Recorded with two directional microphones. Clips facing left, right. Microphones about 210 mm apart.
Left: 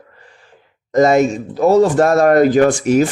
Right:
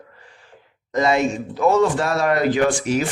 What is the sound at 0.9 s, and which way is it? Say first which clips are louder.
Speech: left 7 dB; 45° left (ahead or behind).